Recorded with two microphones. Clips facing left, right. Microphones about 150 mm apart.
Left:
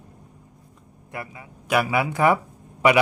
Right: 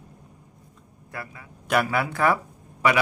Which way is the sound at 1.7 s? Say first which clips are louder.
Left 1 dB; 10° left (ahead or behind).